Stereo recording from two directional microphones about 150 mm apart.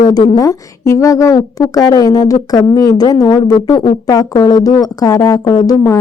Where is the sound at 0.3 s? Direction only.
25° left (ahead or behind).